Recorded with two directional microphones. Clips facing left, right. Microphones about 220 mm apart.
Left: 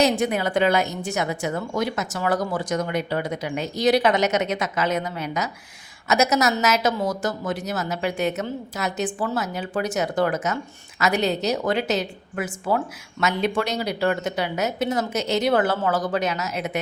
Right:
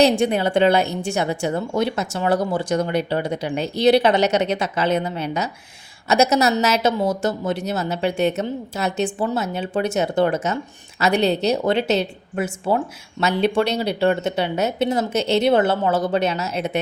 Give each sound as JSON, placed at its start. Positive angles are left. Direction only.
{"t": 0.0, "sound": "speech", "side_deg": -30}